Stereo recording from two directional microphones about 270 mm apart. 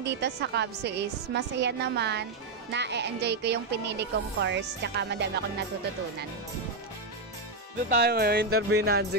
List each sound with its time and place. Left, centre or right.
0.0 s speech: right
8.0 s speech: right